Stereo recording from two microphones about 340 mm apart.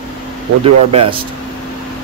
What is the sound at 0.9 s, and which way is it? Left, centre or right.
Speech, centre.